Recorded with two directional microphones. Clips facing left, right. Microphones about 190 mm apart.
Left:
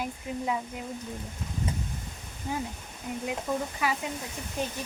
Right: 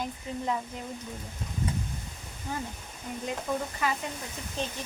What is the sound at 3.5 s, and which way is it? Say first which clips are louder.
Speech: left 1 dB; 5° left (ahead or behind).